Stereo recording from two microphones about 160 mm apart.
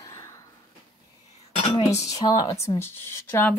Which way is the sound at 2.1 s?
20° left (ahead or behind).